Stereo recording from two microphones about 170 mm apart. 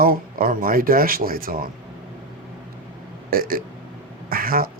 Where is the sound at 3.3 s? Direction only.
60° right (ahead or behind).